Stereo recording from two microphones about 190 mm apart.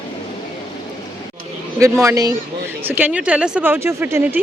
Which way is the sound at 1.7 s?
15° right (ahead or behind).